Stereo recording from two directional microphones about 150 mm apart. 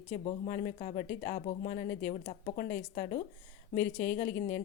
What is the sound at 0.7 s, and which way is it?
Speech, 40° left (ahead or behind).